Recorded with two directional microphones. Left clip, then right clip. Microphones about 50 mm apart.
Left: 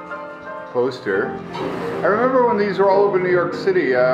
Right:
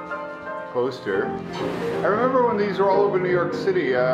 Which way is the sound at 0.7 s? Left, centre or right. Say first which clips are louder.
Left 4 dB; left.